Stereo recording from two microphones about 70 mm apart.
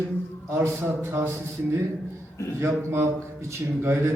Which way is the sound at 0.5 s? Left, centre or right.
Right.